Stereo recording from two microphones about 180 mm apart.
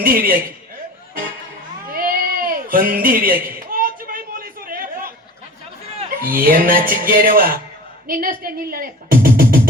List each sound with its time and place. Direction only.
0.0 s music: 55° right (ahead or behind)
1.9 s a sound: 50° right (ahead or behind)
6.2 s music: 55° right (ahead or behind)
8.0 s speech: 55° right (ahead or behind)